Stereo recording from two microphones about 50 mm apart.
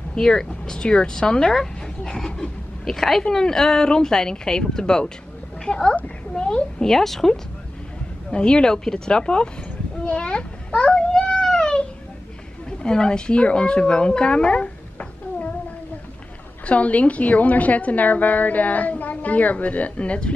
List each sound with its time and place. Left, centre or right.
0.1 s speech: centre
8.3 s a child's voice: centre
11.4 s a sound: centre
12.6 s speech: centre
16.6 s a woman's voice: left